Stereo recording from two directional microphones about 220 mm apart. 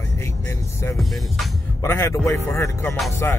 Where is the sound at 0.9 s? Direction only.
Centre (ahead or behind).